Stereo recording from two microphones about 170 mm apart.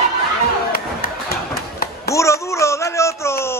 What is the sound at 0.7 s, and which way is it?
Music, 60° left (ahead or behind).